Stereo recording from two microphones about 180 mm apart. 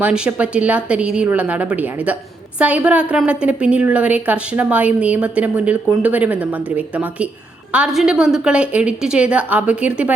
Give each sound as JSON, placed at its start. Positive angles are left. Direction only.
{"t": 0.0, "sound": "a woman's voice", "side_deg": -5}